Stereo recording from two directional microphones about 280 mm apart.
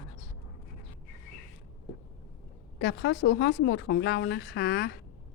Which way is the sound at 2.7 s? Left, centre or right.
Left.